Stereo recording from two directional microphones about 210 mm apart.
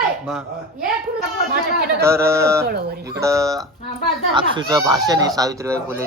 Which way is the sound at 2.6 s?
50° right (ahead or behind).